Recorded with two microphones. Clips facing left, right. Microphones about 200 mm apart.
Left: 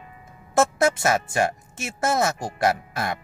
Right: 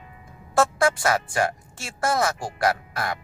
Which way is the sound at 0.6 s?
25° left (ahead or behind).